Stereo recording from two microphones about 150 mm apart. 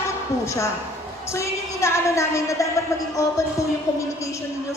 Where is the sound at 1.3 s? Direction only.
20° left (ahead or behind).